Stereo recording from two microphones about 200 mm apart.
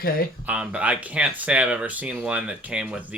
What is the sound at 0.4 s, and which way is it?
Speech, 5° right (ahead or behind).